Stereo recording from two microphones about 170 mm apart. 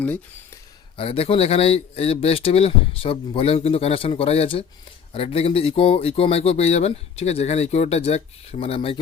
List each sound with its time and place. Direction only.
0.9 s speech: 35° left (ahead or behind)